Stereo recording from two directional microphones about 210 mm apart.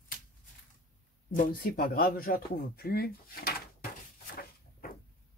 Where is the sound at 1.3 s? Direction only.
40° left (ahead or behind).